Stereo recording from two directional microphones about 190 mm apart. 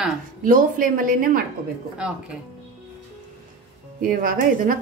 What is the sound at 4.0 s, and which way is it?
Speech, 50° right (ahead or behind).